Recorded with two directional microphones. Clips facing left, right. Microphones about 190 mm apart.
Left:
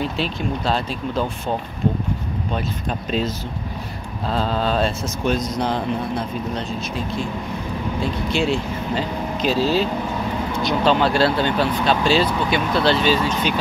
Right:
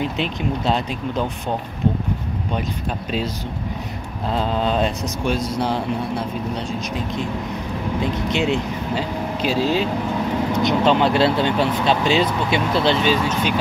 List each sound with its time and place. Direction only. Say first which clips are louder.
0.0 s speech: right 1 dB; 20° right (ahead or behind)
4.3 s speech: even; 20° right (ahead or behind)
8.3 s speech: left 1 dB; 20° right (ahead or behind)